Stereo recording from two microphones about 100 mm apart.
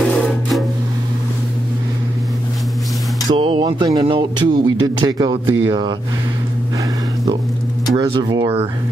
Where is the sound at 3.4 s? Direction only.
60° right (ahead or behind).